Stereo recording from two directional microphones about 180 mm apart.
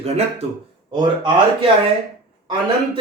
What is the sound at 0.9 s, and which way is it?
Speech, 25° right (ahead or behind).